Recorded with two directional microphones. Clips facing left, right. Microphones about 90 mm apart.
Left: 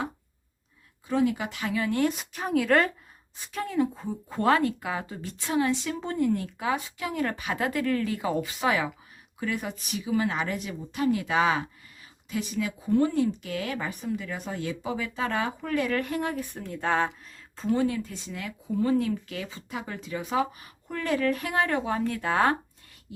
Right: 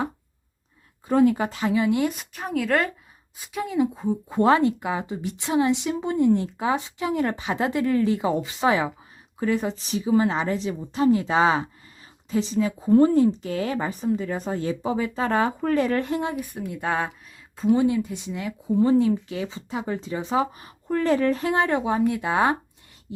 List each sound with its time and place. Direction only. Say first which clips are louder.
1.0 s speech: right 6 dB; 45° right (ahead or behind); by 2.0 s 15° right (ahead or behind)
2.0 s a woman's voice: even; centre (ahead or behind); by 16.4 s 20° right (ahead or behind)
16.4 s a woman's voice: right 2 dB; 10° right (ahead or behind)
17.6 s a woman's voice: right 6 dB; 15° right (ahead or behind)